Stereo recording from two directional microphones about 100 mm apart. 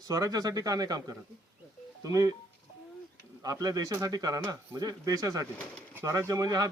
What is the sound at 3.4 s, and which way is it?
Speech, 40° right (ahead or behind).